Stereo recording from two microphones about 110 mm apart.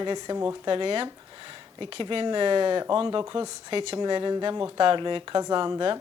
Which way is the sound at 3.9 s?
40° right (ahead or behind).